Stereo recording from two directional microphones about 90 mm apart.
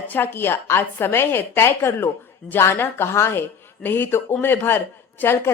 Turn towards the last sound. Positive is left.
turn(degrees=25)  # may be behind; listen again after turning